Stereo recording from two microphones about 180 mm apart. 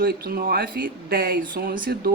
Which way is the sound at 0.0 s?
60° right (ahead or behind).